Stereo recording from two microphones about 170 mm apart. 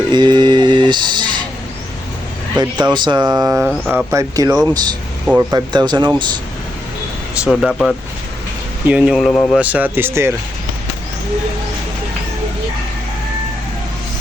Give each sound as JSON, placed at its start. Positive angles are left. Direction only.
{"t": 0.1, "sound": "speech", "side_deg": -25}
{"t": 2.9, "sound": "speech", "side_deg": -25}
{"t": 3.7, "sound": "speech", "side_deg": -5}
{"t": 4.1, "sound": "speech", "side_deg": -15}
{"t": 5.2, "sound": "speech", "side_deg": -10}
{"t": 5.5, "sound": "speech", "side_deg": -25}
{"t": 7.4, "sound": "speech", "side_deg": 0}